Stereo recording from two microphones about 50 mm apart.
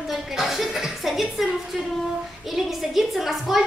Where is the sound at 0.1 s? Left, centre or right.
Centre.